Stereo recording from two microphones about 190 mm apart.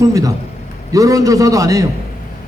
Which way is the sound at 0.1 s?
20° right (ahead or behind).